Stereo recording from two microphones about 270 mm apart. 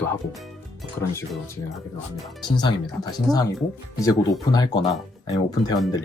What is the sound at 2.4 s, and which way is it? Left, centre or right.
Speech, centre.